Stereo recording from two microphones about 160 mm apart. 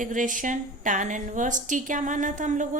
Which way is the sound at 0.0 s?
55° right (ahead or behind).